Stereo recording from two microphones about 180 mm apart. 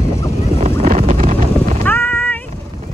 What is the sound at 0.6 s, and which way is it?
Horse, 40° right (ahead or behind).